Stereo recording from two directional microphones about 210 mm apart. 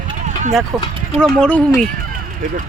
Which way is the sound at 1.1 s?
5° left (ahead or behind).